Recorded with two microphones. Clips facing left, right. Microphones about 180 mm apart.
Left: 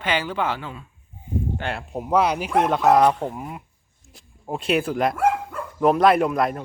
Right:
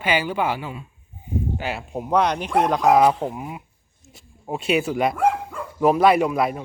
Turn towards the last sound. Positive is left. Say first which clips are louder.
# even
turn(degrees=-5)  # may be behind; listen again after turning